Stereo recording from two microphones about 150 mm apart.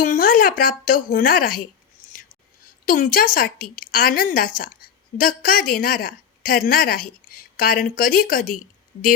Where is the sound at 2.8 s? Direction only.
70° left (ahead or behind).